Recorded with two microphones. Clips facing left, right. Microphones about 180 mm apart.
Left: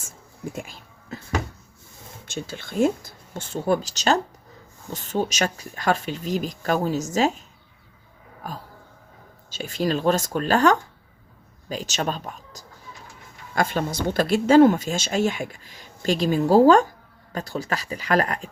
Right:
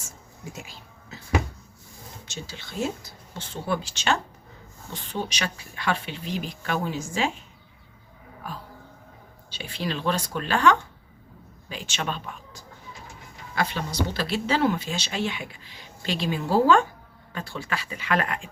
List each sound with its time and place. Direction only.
0.5 s a sound: 50° left (ahead or behind)
2.2 s speech: 50° left (ahead or behind)
8.4 s speech: 40° left (ahead or behind)